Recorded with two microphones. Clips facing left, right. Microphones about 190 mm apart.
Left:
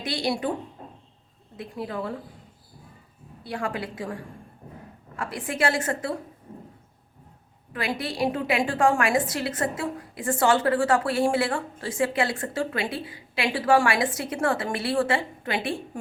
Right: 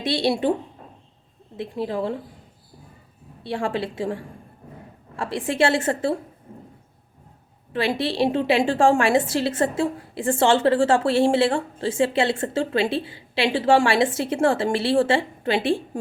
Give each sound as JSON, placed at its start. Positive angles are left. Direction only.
{"t": 0.0, "sound": "a woman's voice", "side_deg": -25}
{"t": 1.5, "sound": "a woman's voice", "side_deg": -25}
{"t": 3.4, "sound": "a woman's voice", "side_deg": -25}
{"t": 7.7, "sound": "a woman's voice", "side_deg": -25}